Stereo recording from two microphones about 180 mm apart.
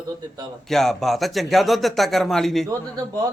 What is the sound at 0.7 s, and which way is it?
Speech, centre (ahead or behind).